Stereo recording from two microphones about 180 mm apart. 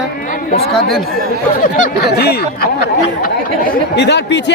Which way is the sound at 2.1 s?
60° left (ahead or behind).